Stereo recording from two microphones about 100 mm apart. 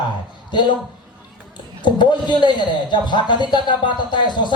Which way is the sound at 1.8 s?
50° left (ahead or behind).